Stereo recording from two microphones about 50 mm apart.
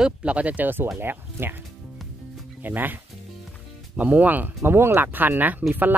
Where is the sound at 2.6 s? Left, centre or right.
Right.